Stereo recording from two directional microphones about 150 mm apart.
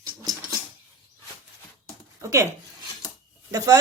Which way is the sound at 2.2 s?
20° right (ahead or behind).